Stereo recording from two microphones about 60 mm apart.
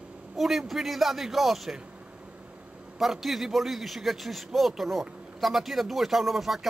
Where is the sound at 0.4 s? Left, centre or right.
Centre.